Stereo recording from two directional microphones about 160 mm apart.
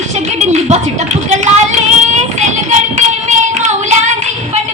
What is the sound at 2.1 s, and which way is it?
Child singing, 45° right (ahead or behind).